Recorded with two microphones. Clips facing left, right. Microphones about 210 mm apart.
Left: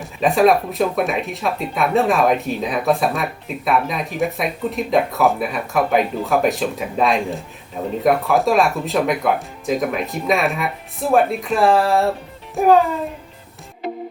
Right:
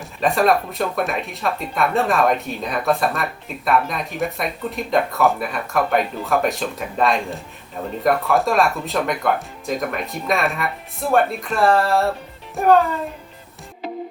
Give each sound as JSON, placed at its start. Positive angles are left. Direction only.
{"t": 0.0, "sound": "speech", "side_deg": 0}